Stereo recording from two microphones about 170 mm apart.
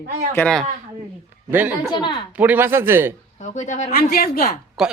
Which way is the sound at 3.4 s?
45° left (ahead or behind).